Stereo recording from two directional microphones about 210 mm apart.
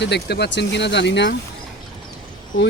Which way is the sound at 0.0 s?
50° left (ahead or behind).